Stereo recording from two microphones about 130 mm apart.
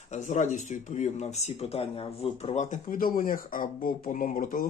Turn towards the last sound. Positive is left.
turn(degrees=85)